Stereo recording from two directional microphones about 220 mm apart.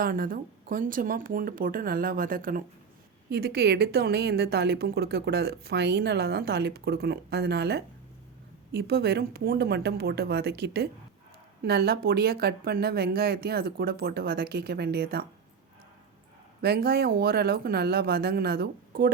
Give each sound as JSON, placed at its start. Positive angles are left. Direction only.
{"t": 0.0, "sound": "a woman's voice", "side_deg": -40}
{"t": 16.6, "sound": "a woman's voice", "side_deg": -45}